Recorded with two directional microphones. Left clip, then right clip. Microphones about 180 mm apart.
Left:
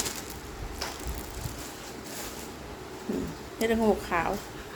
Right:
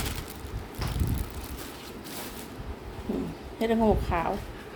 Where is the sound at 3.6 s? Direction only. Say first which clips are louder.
Right 1 dB; 5° right (ahead or behind).